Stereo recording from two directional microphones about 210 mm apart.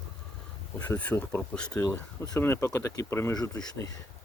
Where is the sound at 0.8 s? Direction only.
5° left (ahead or behind).